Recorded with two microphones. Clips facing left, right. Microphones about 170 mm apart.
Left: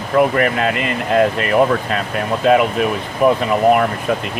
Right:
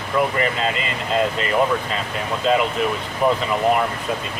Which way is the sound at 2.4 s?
60° left (ahead or behind).